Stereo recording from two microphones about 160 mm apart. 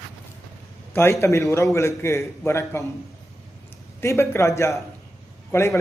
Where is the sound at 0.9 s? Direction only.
15° left (ahead or behind).